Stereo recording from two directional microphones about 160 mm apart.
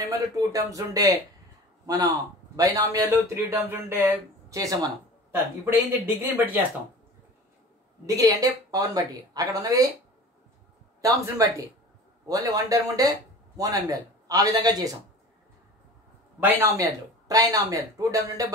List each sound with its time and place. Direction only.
0.1 s a man's voice: 20° right (ahead or behind)
8.2 s a man's voice: 20° right (ahead or behind)
11.0 s a man's voice: 20° right (ahead or behind)
16.3 s a man's voice: 15° right (ahead or behind)